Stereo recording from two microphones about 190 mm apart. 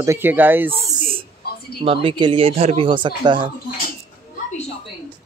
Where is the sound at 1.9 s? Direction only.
25° right (ahead or behind).